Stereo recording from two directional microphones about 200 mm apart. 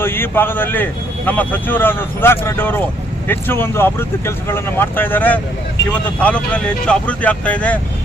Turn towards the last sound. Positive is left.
turn(degrees=5)  # may be behind; listen again after turning